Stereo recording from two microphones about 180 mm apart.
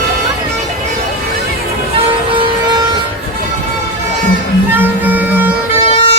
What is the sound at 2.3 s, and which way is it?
Music, 25° right (ahead or behind).